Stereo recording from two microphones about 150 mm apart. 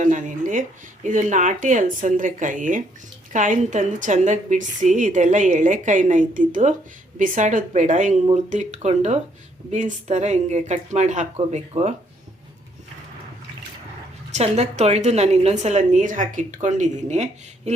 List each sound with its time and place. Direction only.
0.0 s a sound: 55° right (ahead or behind)
1.0 s a woman's voice: 55° right (ahead or behind)
14.3 s a woman's voice: 45° right (ahead or behind)